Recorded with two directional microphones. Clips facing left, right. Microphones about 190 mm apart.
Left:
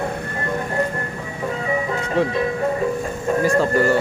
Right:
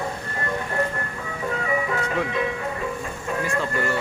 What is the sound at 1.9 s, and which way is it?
Music, 30° left (ahead or behind).